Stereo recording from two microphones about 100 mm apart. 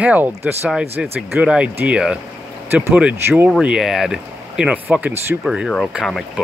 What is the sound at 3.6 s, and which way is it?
Speech, 5° right (ahead or behind).